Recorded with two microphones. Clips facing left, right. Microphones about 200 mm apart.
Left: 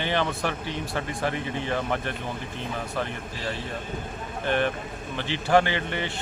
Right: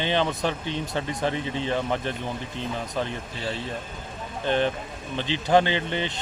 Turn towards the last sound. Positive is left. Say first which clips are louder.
# right 2 dB
turn(degrees=-20)  # may be behind; listen again after turning